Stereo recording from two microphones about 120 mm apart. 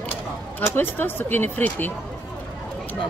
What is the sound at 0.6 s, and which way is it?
Speech, 15° left (ahead or behind).